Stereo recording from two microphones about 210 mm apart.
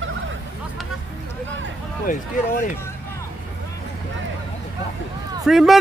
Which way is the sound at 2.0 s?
40° left (ahead or behind).